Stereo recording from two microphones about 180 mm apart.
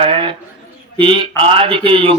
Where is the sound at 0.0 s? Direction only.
30° right (ahead or behind).